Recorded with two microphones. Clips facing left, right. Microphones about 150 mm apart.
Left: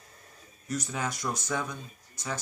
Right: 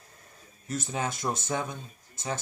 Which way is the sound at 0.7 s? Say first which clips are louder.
Right 1 dB; 25° right (ahead or behind).